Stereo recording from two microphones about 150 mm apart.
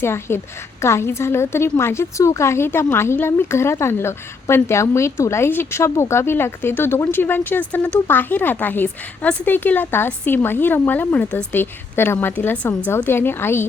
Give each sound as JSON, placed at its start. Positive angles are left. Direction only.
{"t": 0.0, "sound": "a woman's voice", "side_deg": 15}